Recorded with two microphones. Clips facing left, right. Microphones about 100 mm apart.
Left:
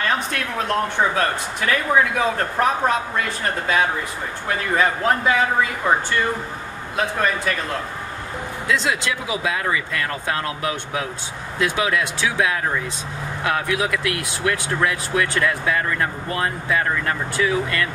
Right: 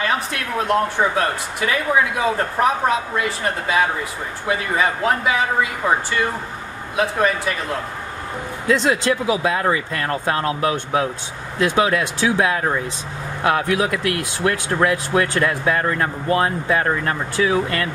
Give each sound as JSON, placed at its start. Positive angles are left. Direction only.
{"t": 0.0, "sound": "speech", "side_deg": -5}
{"t": 7.0, "sound": "speech", "side_deg": -5}
{"t": 8.6, "sound": "speech", "side_deg": -40}